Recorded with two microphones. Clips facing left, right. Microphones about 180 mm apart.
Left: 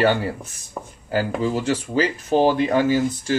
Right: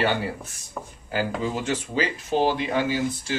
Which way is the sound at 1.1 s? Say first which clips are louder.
Left 4 dB; 40° left (ahead or behind).